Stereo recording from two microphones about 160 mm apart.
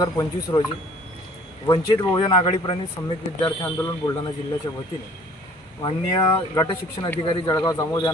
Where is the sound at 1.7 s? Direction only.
30° left (ahead or behind).